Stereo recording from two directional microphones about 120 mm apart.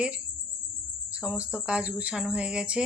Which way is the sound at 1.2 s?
10° right (ahead or behind).